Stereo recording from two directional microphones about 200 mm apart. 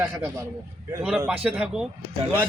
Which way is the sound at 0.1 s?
15° right (ahead or behind).